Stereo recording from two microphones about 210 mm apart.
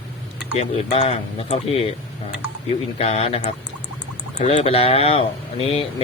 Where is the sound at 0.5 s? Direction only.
30° left (ahead or behind).